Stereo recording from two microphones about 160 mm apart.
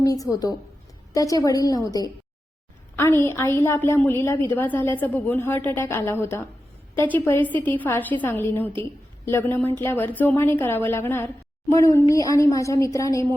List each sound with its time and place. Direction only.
0.0 s a woman's voice: 20° left (ahead or behind)